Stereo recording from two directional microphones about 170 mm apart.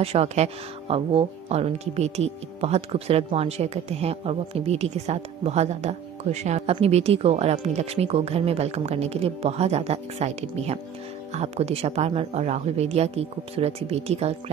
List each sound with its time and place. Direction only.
0.0 s speech: 35° right (ahead or behind)